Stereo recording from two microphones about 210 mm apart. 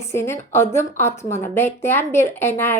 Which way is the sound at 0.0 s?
10° left (ahead or behind).